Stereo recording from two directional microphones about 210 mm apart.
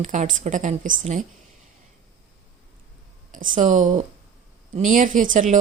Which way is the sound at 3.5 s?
35° right (ahead or behind).